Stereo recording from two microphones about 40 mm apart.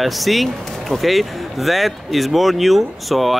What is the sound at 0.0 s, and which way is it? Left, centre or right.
Speech, centre.